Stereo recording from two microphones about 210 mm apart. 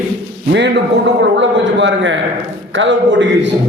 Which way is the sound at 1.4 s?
60° right (ahead or behind).